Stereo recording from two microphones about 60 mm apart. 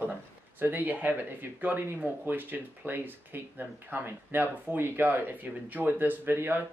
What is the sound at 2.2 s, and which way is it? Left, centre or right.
Speech, right.